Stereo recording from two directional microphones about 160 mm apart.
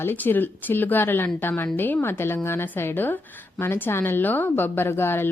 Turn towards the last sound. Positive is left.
turn(degrees=15)  # may be behind; listen again after turning